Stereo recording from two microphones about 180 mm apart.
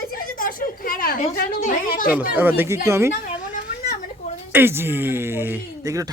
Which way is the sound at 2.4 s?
10° right (ahead or behind).